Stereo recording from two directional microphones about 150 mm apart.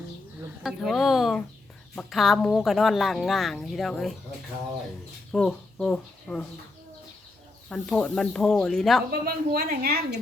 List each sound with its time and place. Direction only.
0.6 s a woman's voice: centre (ahead or behind)
5.3 s speech: 5° left (ahead or behind)
7.7 s a woman's voice: 5° left (ahead or behind)
9.2 s a woman's voice: 90° right